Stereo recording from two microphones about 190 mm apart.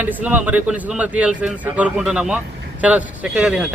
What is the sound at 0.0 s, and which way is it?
Speech, 5° right (ahead or behind).